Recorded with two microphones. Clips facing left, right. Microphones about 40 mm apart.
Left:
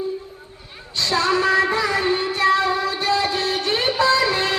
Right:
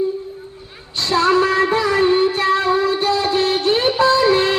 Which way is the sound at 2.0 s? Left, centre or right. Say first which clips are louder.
Right 5 dB; right.